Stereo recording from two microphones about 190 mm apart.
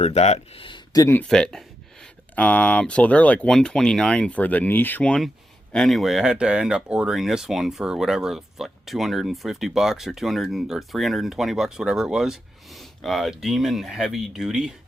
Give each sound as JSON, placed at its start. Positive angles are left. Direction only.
{"t": 0.0, "sound": "speech", "side_deg": 35}
{"t": 1.0, "sound": "speech", "side_deg": 10}